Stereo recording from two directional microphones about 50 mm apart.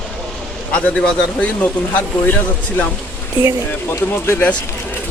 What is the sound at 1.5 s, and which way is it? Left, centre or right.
Speech, left.